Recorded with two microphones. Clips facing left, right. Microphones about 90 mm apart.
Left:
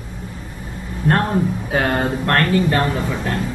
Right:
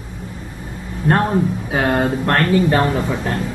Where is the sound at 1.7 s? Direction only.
5° right (ahead or behind).